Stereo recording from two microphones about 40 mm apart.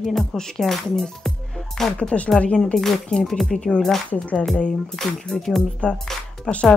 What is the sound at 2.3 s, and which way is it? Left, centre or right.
Speech, left.